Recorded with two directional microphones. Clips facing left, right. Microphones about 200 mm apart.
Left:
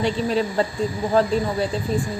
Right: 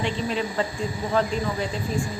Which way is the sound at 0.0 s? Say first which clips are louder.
Left 5 dB; 40° left (ahead or behind).